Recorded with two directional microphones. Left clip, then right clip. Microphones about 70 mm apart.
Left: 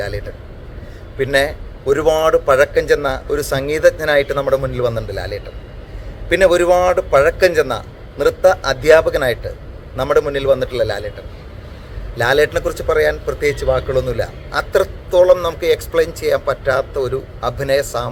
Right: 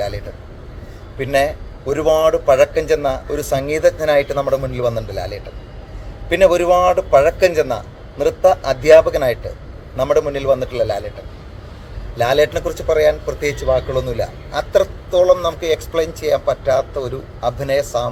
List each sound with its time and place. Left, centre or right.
1.2 s a man's voice: left
8.4 s a man's voice: centre; by 10.9 s left
12.1 s a man's voice: left
14.0 s a man's voice: left
14.7 s speech: left